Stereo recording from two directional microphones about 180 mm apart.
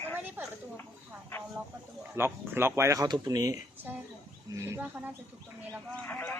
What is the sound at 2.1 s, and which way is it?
A man's voice, 15° right (ahead or behind).